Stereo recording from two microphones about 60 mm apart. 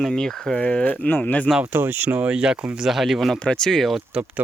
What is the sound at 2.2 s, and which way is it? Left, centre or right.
Speech, centre.